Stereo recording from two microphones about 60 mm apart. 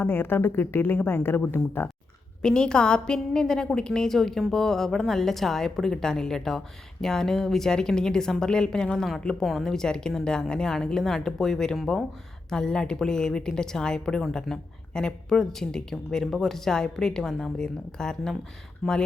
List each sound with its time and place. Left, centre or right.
0.0 s speech: left
2.4 s a woman's voice: centre
9.4 s a woman's voice: centre
18.8 s speech: centre